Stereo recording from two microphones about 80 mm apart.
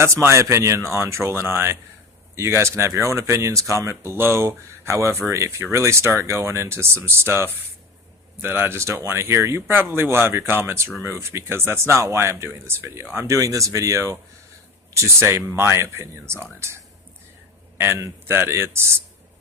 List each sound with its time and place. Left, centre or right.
0.0 s speech: right
13.2 s speech: right
17.7 s speech: right